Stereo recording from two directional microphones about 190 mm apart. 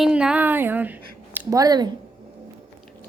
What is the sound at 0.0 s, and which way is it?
A woman's voice, 5° right (ahead or behind).